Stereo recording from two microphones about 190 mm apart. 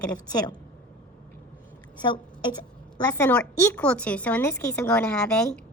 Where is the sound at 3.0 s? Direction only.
10° left (ahead or behind).